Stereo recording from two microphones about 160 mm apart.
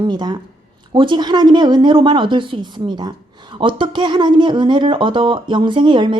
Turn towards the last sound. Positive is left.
turn(degrees=-30)  # may be behind; listen again after turning